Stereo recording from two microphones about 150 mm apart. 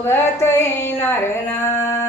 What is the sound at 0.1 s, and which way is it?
Speech, 15° left (ahead or behind).